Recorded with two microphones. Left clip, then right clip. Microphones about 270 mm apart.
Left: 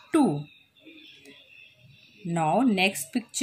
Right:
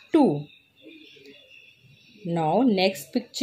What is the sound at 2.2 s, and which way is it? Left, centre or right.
Speech, centre.